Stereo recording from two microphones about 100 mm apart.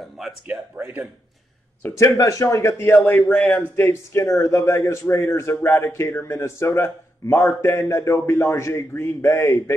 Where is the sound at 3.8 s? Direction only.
30° left (ahead or behind).